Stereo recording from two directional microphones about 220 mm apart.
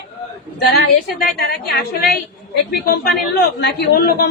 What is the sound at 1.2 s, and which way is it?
Speech, 45° left (ahead or behind).